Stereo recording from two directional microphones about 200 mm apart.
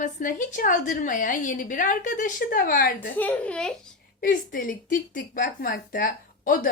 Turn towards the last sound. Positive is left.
turn(degrees=45)  # may be behind; listen again after turning